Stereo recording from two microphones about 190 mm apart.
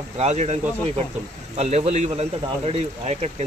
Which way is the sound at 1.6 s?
35° right (ahead or behind).